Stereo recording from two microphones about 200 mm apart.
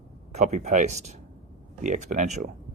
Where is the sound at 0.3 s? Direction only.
35° right (ahead or behind).